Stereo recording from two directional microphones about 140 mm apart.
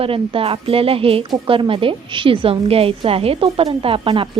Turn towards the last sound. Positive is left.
turn(degrees=-40)  # may be behind; listen again after turning